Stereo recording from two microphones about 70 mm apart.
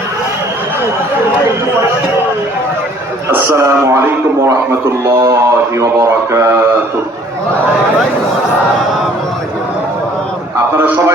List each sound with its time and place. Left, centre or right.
3.2 s a sound: right
5.0 s speech: right
10.8 s a man's voice: right